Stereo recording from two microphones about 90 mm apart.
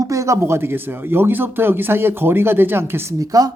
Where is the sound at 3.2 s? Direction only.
45° right (ahead or behind).